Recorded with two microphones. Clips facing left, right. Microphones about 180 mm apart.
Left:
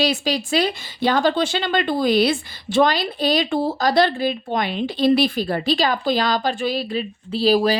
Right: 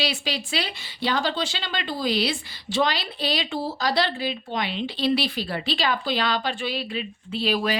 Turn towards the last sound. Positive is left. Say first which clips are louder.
# left 7 dB
turn(degrees=35)  # may be behind; listen again after turning